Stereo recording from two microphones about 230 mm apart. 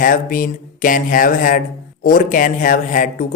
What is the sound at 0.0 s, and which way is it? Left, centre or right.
Speech, left.